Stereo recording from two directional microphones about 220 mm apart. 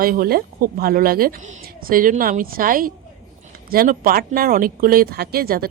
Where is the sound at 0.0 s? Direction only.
40° right (ahead or behind).